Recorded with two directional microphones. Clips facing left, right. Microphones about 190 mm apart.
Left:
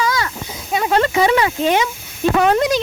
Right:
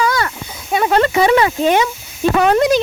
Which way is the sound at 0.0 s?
60° right (ahead or behind).